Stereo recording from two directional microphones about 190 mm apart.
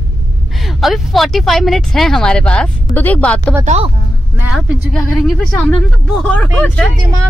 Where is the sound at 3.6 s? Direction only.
35° right (ahead or behind).